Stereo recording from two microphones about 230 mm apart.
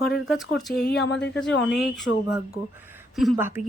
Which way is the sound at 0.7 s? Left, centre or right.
Left.